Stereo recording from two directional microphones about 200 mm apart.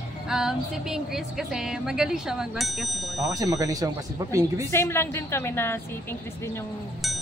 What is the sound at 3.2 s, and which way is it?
A man's voice, 15° right (ahead or behind).